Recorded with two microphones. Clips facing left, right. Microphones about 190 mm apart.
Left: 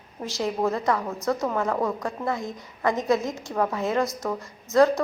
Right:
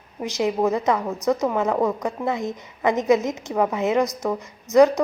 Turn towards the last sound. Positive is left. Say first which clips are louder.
# right 4 dB
turn(degrees=-20)  # may be behind; listen again after turning